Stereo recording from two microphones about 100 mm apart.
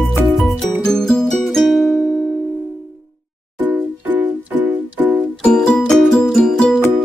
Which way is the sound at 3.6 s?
15° right (ahead or behind).